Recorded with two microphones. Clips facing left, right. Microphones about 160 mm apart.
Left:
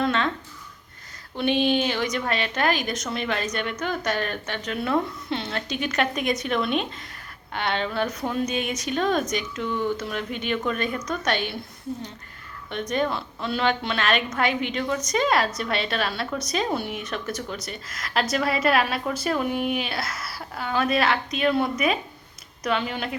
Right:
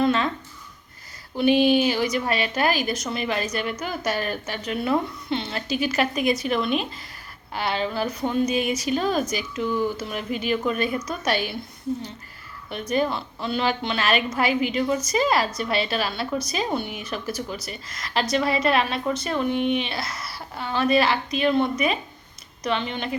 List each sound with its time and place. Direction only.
0.0 s a sound: centre (ahead or behind)
1.4 s a woman's voice: 5° right (ahead or behind)
12.7 s a woman's voice: 5° right (ahead or behind)